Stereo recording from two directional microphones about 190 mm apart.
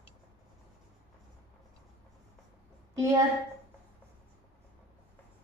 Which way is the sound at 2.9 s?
15° right (ahead or behind).